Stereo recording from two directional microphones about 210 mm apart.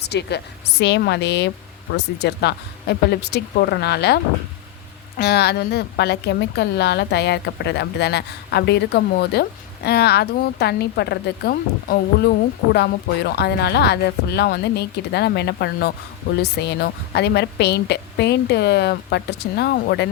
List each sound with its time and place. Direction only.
0.0 s a woman's voice: 50° left (ahead or behind)